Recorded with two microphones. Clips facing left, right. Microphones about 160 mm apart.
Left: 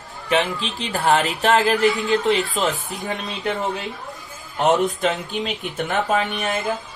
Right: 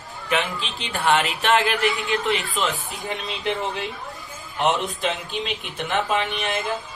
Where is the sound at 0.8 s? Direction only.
35° left (ahead or behind).